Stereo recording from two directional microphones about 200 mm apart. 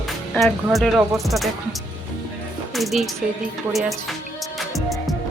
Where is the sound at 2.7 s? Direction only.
Centre (ahead or behind).